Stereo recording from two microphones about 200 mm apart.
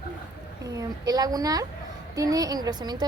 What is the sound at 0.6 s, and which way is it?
A woman's voice, 20° right (ahead or behind).